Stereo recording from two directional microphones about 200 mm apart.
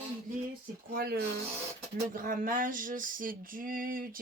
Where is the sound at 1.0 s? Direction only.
55° right (ahead or behind).